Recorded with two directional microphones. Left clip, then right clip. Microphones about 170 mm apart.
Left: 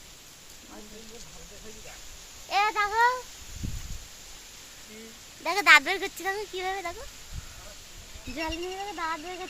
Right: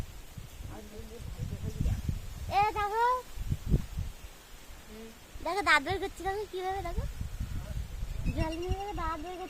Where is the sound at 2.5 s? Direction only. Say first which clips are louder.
Left 4 dB; 10° left (ahead or behind).